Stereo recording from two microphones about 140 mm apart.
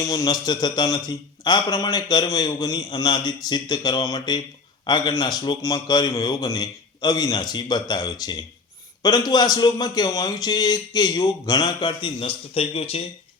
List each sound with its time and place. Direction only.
0.0 s a man's voice: 25° left (ahead or behind); by 13.0 s 45° left (ahead or behind)